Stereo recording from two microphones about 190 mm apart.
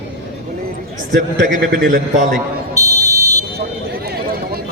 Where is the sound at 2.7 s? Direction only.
15° right (ahead or behind).